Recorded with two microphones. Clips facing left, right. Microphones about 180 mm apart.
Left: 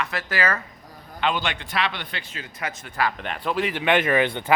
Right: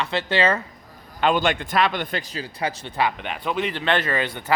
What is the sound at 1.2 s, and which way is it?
A man's voice, 45° right (ahead or behind).